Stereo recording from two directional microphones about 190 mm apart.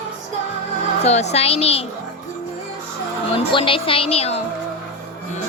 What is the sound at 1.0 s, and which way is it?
Speech, 35° left (ahead or behind).